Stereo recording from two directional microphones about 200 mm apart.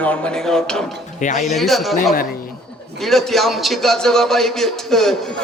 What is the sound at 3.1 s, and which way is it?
A man's voice, centre (ahead or behind).